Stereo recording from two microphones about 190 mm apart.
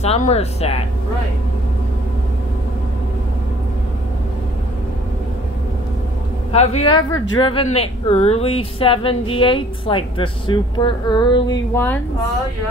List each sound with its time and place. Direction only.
0.0 s speech: 35° left (ahead or behind)
6.5 s speech: 35° left (ahead or behind); by 12.0 s 10° left (ahead or behind)